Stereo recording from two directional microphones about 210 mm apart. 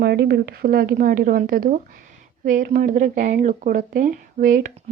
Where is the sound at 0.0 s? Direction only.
50° right (ahead or behind).